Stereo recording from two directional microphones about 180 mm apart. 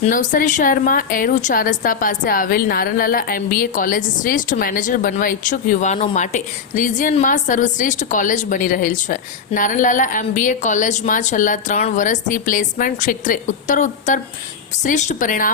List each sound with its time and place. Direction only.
0.0 s a woman's voice: 45° left (ahead or behind)